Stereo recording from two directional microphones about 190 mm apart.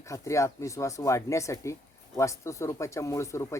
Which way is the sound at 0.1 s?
15° left (ahead or behind).